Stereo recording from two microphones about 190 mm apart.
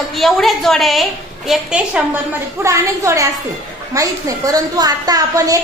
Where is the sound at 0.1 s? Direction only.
Centre (ahead or behind).